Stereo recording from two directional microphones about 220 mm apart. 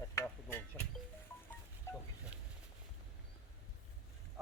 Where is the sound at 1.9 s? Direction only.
10° left (ahead or behind).